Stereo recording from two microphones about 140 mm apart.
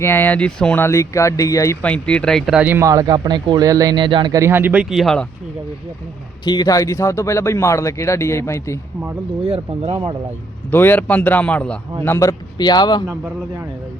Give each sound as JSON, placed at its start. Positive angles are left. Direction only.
{"t": 0.0, "sound": "speech", "side_deg": 15}
{"t": 0.9, "sound": "speech", "side_deg": 20}
{"t": 1.8, "sound": "speech", "side_deg": 10}
{"t": 2.6, "sound": "speech", "side_deg": -15}
{"t": 6.4, "sound": "speech", "side_deg": 30}
{"t": 9.4, "sound": "speech", "side_deg": -45}
{"t": 10.7, "sound": "speech", "side_deg": 15}
{"t": 12.0, "sound": "speech", "side_deg": 20}